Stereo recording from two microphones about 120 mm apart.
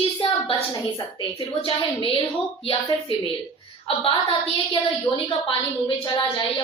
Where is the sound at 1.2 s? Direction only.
40° left (ahead or behind).